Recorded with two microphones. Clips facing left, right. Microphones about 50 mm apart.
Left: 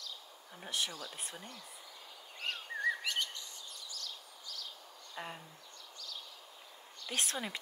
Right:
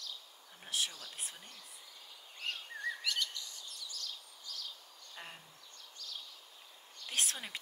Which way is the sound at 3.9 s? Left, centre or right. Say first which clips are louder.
Even; left.